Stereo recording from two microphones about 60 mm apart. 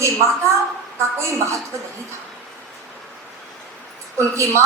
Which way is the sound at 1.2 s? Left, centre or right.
Right.